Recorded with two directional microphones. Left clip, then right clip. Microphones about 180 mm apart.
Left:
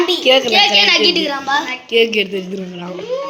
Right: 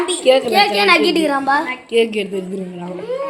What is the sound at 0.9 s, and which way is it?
Speech, 80° right.